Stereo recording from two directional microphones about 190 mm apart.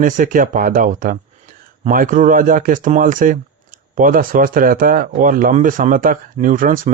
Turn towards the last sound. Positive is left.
turn(degrees=-45)  # may be behind; listen again after turning